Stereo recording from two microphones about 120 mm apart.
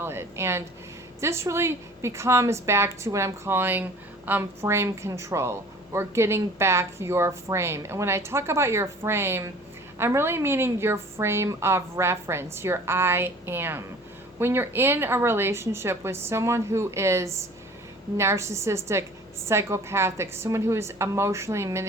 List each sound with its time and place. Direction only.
0.0 s a woman's voice: 20° right (ahead or behind)